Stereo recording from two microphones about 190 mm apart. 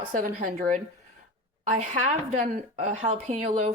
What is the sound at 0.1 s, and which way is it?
A woman's voice, 45° right (ahead or behind).